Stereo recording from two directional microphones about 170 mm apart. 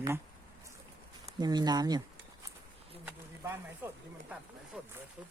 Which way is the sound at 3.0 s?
10° right (ahead or behind).